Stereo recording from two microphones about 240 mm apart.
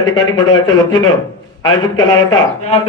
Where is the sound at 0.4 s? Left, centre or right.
Left.